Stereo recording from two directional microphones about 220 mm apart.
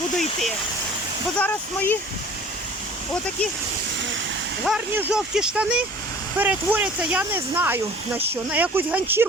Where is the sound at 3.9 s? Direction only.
55° right (ahead or behind).